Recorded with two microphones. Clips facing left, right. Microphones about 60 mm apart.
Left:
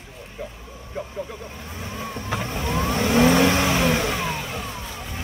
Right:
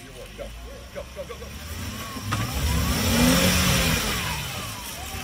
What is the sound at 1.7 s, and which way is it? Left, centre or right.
Vehicle, left.